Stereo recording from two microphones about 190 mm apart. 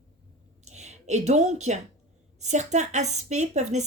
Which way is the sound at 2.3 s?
35° right (ahead or behind).